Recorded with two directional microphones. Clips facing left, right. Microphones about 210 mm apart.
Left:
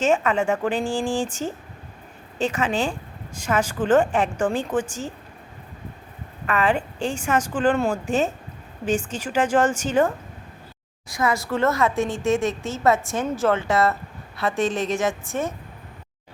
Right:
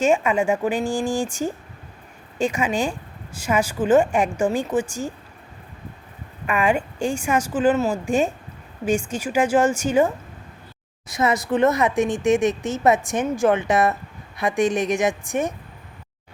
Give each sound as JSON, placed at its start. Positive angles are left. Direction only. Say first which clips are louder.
{"t": 0.0, "sound": "a woman's voice", "louder": "right 2 dB", "side_deg": -10}
{"t": 6.4, "sound": "a woman's voice", "louder": "right 1 dB", "side_deg": -10}
{"t": 11.1, "sound": "a woman's voice", "louder": "right 3 dB", "side_deg": -20}